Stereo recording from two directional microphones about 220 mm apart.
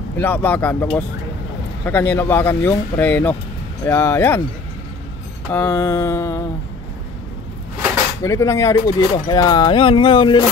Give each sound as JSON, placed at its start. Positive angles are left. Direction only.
{"t": 0.2, "sound": "speech", "side_deg": 10}
{"t": 1.9, "sound": "speech", "side_deg": 10}
{"t": 5.5, "sound": "speech", "side_deg": 10}
{"t": 8.2, "sound": "speech", "side_deg": 15}